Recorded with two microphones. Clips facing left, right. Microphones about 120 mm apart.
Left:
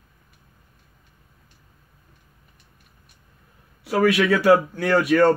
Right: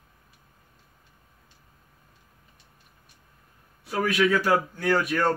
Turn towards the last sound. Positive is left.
turn(degrees=70)  # may be behind; listen again after turning